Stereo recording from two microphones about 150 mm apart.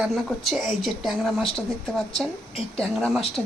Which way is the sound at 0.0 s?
Centre (ahead or behind).